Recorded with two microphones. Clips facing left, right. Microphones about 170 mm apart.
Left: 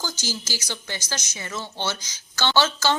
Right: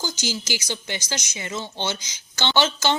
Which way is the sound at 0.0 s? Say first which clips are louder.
Right 3 dB; 15° right (ahead or behind).